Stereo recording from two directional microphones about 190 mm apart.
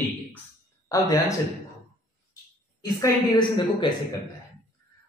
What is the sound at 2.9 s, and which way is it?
Speech, 20° left (ahead or behind).